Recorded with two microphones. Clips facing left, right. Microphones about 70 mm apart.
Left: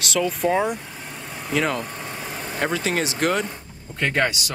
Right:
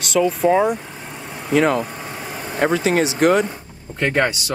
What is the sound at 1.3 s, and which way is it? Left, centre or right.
Vehicle, centre.